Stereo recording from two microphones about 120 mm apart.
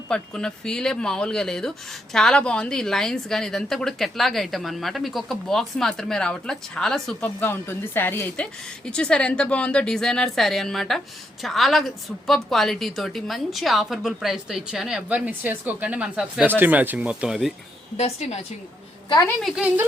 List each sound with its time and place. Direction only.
0.1 s a woman's voice: 5° left (ahead or behind)
7.3 s a woman's voice: 20° left (ahead or behind); by 17.5 s 5° right (ahead or behind)
17.9 s a woman's voice: 65° left (ahead or behind)
19.4 s a woman's voice: centre (ahead or behind)